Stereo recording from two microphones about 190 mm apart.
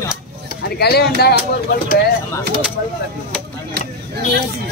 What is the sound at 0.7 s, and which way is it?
Speech, 55° left (ahead or behind).